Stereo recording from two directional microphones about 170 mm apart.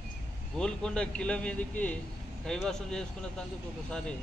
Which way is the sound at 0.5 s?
5° left (ahead or behind).